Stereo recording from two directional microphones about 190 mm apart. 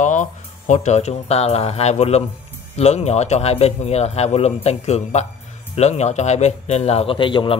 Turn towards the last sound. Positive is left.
turn(degrees=25)  # may be behind; listen again after turning